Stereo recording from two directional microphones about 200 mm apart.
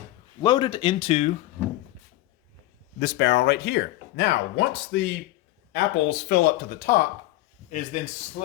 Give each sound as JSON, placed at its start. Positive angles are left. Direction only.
{"t": 0.4, "sound": "speech", "side_deg": 20}
{"t": 3.0, "sound": "speech", "side_deg": 60}